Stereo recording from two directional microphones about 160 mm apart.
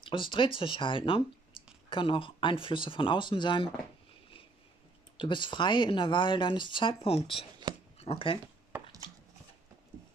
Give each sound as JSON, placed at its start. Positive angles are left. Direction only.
{"t": 0.0, "sound": "speech", "side_deg": 30}
{"t": 5.1, "sound": "speech", "side_deg": 30}
{"t": 8.7, "sound": "chopping", "side_deg": -15}
{"t": 9.9, "sound": "clip-clop", "side_deg": -15}